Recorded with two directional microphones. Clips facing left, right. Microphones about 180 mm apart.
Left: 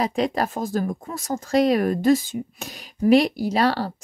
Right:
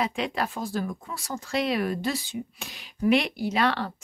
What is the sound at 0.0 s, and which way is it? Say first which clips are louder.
Speech: left 5 dB; 40° left (ahead or behind).